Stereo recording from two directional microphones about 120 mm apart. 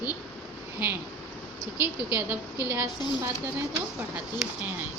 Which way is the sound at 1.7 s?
15° right (ahead or behind).